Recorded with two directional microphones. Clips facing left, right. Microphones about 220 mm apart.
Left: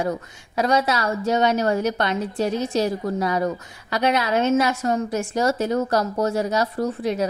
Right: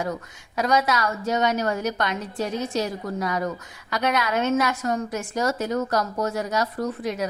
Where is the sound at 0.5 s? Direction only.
30° left (ahead or behind).